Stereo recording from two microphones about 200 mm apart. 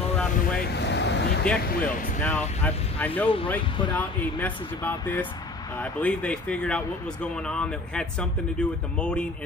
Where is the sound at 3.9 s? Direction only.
10° left (ahead or behind).